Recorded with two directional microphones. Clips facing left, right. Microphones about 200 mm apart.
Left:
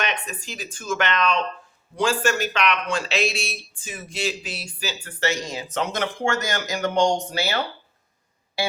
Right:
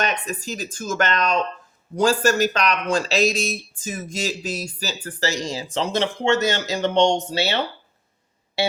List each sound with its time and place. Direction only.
0.0 s speech: 40° right (ahead or behind)